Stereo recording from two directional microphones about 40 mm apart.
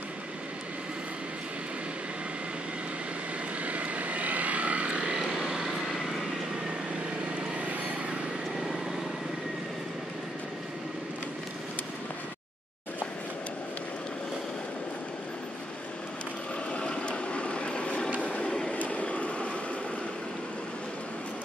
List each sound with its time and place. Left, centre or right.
3.6 s vehicle: right
5.3 s vehicle: centre
7.3 s vehicle: right
16.7 s vehicle: left
18.2 s train: left
18.9 s vehicle: left